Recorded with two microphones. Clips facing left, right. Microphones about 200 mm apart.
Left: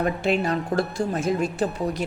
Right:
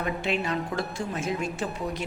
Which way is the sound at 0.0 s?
40° left (ahead or behind).